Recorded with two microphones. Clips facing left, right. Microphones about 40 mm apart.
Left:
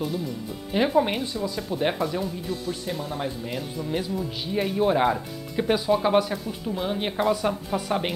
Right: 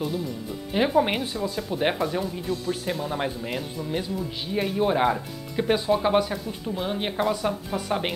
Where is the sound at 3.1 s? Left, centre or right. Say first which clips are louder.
Right 2 dB; right.